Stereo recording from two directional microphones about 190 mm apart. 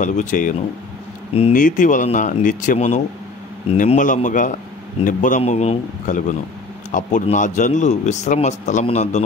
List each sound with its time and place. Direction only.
0.0 s speech: 40° left (ahead or behind)